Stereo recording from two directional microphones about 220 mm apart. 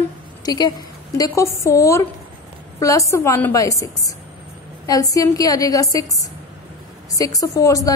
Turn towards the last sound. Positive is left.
turn(degrees=15)  # may be behind; listen again after turning